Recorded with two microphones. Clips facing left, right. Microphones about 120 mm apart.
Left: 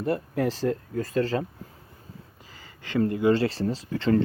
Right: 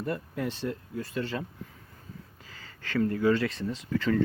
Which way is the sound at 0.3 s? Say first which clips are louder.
Left 7 dB; 90° left.